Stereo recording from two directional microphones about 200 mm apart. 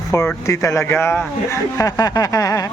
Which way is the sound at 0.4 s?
15° left (ahead or behind).